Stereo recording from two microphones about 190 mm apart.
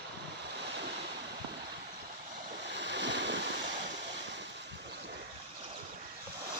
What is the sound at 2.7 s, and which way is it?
Waves, 65° right (ahead or behind).